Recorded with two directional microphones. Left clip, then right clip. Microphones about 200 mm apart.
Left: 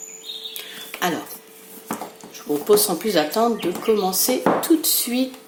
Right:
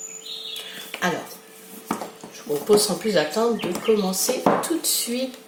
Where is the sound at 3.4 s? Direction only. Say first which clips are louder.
Left 4 dB; 50° left (ahead or behind).